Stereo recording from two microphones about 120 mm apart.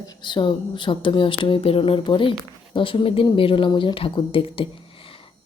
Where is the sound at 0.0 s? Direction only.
40° left (ahead or behind).